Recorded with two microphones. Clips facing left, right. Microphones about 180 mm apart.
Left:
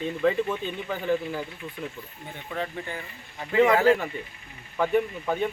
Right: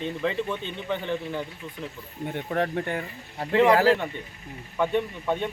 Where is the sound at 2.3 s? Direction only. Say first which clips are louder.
Right 6 dB; 60° right (ahead or behind).